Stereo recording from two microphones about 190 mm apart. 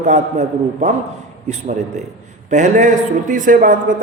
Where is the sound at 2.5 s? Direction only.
40° right (ahead or behind).